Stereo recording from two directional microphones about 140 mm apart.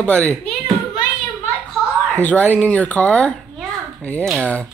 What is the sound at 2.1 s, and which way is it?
Speech, 10° left (ahead or behind).